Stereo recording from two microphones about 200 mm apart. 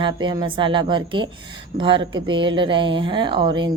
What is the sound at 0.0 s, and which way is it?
Speech, 25° right (ahead or behind).